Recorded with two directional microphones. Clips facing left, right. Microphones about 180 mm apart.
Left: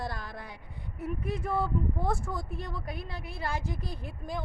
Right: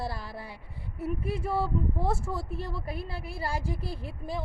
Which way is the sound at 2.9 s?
30° right (ahead or behind).